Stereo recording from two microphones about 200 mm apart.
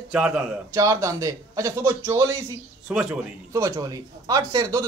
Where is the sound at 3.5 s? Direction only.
15° right (ahead or behind).